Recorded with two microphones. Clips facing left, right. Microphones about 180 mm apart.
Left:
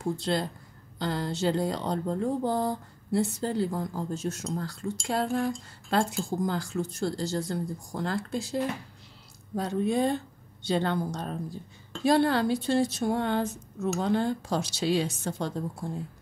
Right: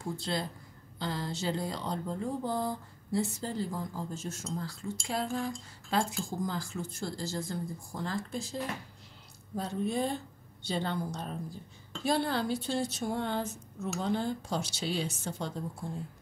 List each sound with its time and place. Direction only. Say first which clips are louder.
0.0 s speech: left 6 dB; 60° left (ahead or behind)
9.6 s speech: left 5 dB; 70° left (ahead or behind)